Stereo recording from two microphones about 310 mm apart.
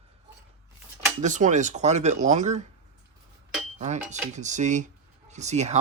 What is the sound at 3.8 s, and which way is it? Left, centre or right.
Speech, right.